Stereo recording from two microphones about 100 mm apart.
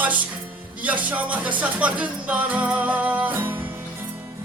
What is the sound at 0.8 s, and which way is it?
Speech, 15° right (ahead or behind).